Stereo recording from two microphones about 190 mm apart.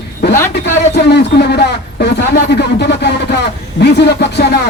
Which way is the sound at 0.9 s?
60° left (ahead or behind).